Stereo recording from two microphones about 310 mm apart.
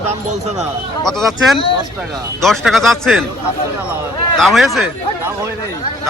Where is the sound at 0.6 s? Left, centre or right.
Centre.